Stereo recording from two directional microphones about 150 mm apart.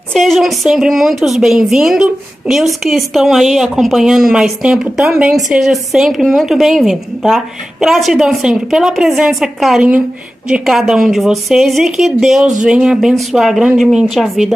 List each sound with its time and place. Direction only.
0.1 s a woman's voice: centre (ahead or behind)